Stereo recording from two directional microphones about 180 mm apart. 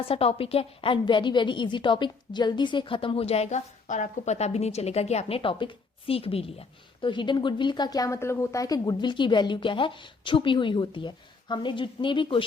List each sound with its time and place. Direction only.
0.0 s a woman's voice: 35° left (ahead or behind)